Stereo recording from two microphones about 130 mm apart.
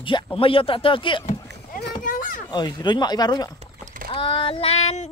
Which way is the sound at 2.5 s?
35° left (ahead or behind).